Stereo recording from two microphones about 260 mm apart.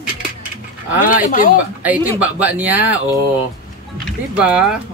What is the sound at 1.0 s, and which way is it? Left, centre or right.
Speech, left.